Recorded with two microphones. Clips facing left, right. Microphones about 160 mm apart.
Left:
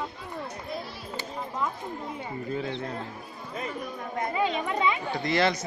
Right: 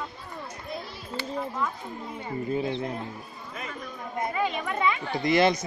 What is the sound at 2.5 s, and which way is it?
Speech, 20° right (ahead or behind).